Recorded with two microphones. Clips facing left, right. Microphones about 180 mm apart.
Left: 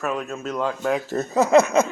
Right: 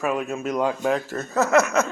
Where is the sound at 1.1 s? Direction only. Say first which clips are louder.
Left 5 dB; 15° left (ahead or behind).